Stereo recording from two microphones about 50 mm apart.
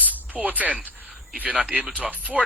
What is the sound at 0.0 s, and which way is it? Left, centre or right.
Speech, right.